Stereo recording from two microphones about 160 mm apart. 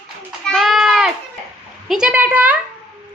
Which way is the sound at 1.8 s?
5° right (ahead or behind).